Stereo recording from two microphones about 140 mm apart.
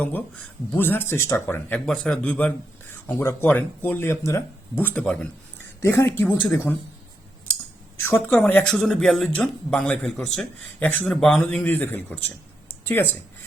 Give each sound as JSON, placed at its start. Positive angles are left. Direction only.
{"t": 0.0, "sound": "speech", "side_deg": 10}
{"t": 1.9, "sound": "a man's voice", "side_deg": 5}
{"t": 5.8, "sound": "speech", "side_deg": 20}
{"t": 8.0, "sound": "speech", "side_deg": 15}